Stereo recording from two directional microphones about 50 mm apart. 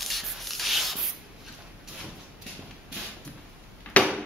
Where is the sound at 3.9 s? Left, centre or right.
Left.